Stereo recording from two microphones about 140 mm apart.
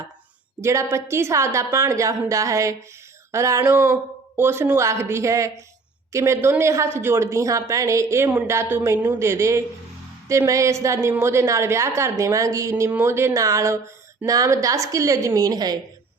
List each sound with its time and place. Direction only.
0.6 s a woman's voice: 20° right (ahead or behind)